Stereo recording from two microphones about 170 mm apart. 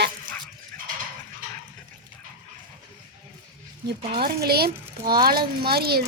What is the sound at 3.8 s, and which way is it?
A woman's voice, 70° right (ahead or behind).